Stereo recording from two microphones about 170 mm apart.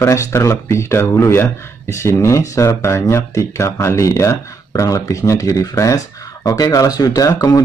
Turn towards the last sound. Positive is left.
turn(degrees=20)  # may be behind; listen again after turning